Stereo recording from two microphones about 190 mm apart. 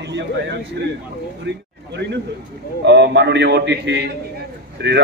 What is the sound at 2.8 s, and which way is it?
A man's voice, 65° right (ahead or behind).